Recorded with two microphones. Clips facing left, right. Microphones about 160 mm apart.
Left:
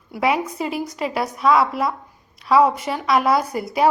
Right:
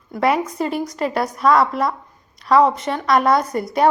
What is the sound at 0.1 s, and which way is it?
A woman's voice, centre (ahead or behind).